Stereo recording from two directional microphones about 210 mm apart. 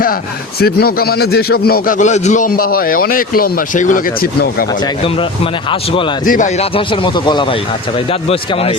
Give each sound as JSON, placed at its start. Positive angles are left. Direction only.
{"t": 0.6, "sound": "a man's voice", "side_deg": 45}
{"t": 4.8, "sound": "speech", "side_deg": 25}
{"t": 6.2, "sound": "speech", "side_deg": 40}